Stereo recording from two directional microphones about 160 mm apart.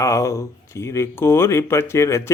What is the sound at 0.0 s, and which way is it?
Speech, 20° left (ahead or behind).